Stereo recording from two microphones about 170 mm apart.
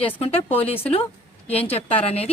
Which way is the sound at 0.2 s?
35° left (ahead or behind).